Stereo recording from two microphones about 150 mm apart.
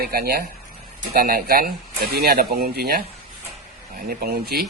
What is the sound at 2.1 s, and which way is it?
Speech, 90° right.